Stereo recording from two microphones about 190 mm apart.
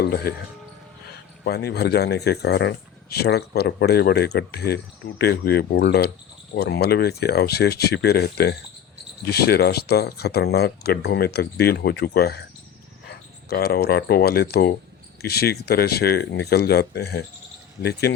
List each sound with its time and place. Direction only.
0.0 s speech: 55° left (ahead or behind)
1.5 s speech: 60° left (ahead or behind)